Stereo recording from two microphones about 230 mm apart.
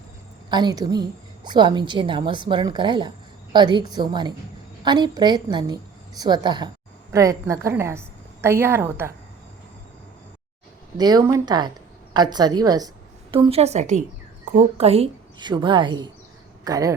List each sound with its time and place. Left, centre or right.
0.5 s a woman's voice: centre
10.9 s a woman's voice: centre